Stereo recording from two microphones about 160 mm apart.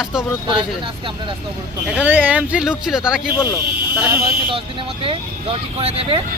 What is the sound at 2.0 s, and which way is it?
Speech, 10° right (ahead or behind).